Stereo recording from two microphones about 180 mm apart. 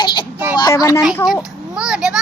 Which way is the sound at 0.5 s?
20° left (ahead or behind).